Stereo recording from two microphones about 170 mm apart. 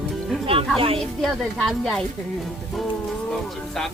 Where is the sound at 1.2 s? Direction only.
Centre (ahead or behind).